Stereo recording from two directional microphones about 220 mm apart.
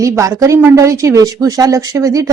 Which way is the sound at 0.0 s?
15° right (ahead or behind).